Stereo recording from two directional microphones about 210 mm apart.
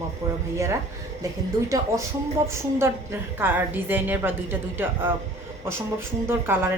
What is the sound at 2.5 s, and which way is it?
A woman's voice, 15° right (ahead or behind).